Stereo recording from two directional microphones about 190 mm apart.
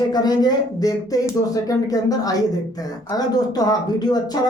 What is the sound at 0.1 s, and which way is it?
Speech, 20° left (ahead or behind).